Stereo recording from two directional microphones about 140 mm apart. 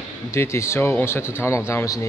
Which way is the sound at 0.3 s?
20° left (ahead or behind).